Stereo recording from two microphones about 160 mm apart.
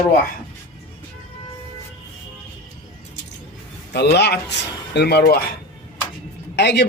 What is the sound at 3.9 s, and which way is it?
Speech, 90° left.